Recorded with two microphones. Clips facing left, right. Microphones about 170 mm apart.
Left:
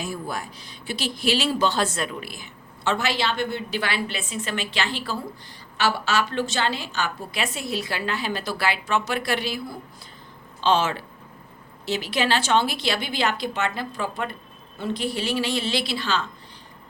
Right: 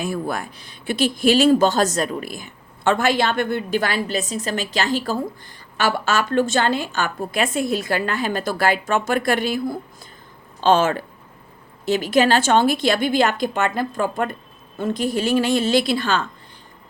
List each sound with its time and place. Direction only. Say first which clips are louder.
0.0 s speech: right 6 dB; 60° right (ahead or behind)